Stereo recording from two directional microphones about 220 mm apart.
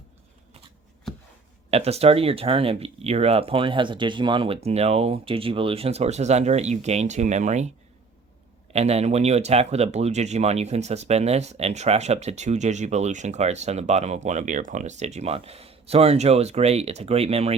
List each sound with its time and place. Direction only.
1.7 s speech: 30° right (ahead or behind)
8.7 s speech: 30° right (ahead or behind)